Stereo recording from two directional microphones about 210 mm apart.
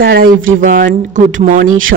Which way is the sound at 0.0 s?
45° right (ahead or behind).